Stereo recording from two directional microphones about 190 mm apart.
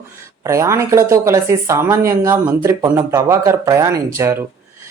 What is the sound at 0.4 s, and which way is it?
Speech, 15° right (ahead or behind).